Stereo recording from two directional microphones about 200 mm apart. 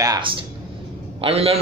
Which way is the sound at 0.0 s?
20° right (ahead or behind).